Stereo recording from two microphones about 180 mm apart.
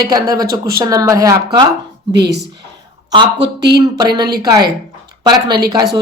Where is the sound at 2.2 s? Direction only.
70° right (ahead or behind).